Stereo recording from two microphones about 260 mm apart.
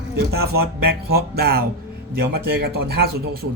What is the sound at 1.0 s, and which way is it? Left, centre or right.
Speech, right.